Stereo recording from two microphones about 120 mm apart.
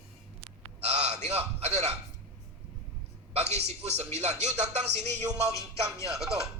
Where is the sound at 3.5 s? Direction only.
65° right (ahead or behind).